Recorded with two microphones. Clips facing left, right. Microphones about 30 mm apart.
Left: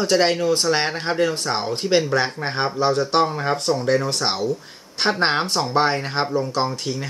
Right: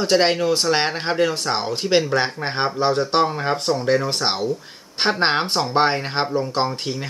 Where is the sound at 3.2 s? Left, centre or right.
Centre.